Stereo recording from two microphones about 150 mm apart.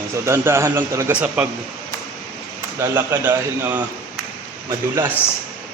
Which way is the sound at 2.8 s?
15° right (ahead or behind).